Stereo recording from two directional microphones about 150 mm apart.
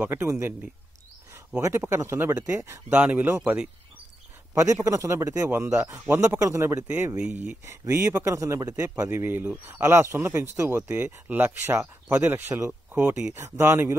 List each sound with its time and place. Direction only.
0.0 s a man's voice: 15° right (ahead or behind)